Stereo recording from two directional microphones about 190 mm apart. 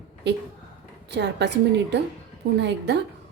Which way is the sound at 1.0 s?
65° right (ahead or behind).